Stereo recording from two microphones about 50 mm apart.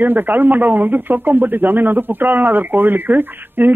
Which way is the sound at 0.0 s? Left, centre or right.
Right.